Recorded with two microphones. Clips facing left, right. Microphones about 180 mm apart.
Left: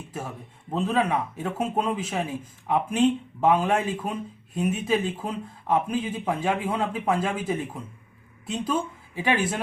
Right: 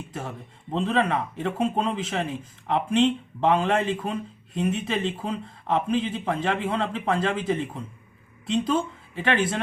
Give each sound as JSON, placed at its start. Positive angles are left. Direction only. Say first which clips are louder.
{"t": 0.1, "sound": "speech", "louder": "even", "side_deg": 5}